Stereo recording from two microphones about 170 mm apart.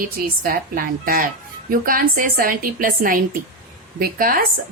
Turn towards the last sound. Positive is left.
turn(degrees=-60)  # may be behind; listen again after turning